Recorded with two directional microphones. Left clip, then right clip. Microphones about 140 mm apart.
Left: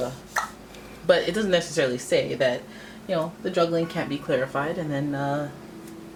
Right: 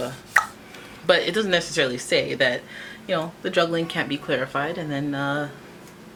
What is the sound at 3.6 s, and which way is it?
Speech, 35° right (ahead or behind).